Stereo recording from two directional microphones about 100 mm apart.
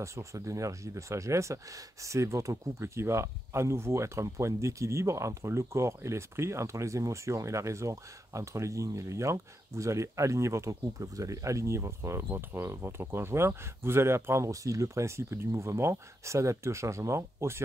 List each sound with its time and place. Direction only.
0.0 s speech: 30° right (ahead or behind)